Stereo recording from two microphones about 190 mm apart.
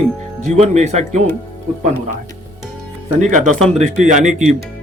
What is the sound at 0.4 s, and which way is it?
Speech, 35° right (ahead or behind).